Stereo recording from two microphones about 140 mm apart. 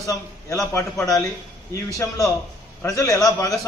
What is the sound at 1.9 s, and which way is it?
A man's voice, 20° left (ahead or behind).